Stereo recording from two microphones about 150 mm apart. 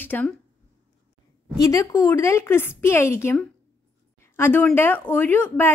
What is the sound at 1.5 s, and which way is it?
A woman's voice, 25° left (ahead or behind).